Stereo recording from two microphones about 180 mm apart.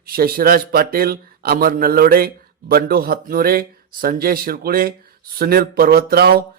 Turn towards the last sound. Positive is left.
turn(degrees=-60)  # may be behind; listen again after turning